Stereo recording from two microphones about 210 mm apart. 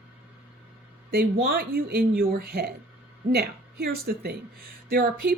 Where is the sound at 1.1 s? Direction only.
50° right (ahead or behind).